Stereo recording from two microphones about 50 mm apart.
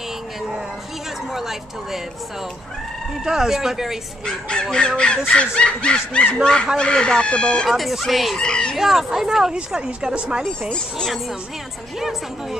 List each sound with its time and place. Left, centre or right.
1.3 s speech: centre
3.3 s speech: centre
4.3 s speech: centre
7.6 s speech: centre
8.4 s speech: centre
8.7 s speech: centre
12.0 s speech: centre